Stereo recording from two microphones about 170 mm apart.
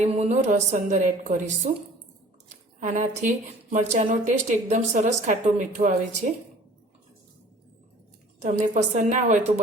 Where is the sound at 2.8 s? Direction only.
45° right (ahead or behind).